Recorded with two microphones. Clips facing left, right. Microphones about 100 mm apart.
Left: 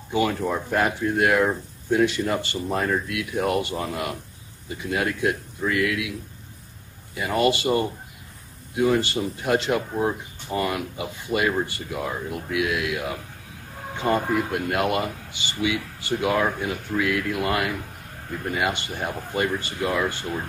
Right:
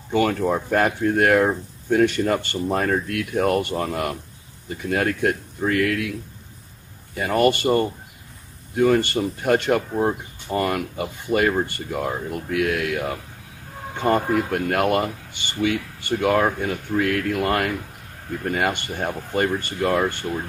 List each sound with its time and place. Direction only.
0.1 s speech: 50° right (ahead or behind)
7.2 s speech: 50° right (ahead or behind)